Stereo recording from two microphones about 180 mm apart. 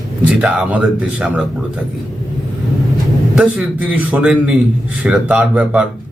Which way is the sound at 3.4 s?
5° right (ahead or behind).